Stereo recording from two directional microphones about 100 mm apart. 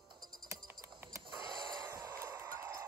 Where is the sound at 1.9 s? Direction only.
30° right (ahead or behind).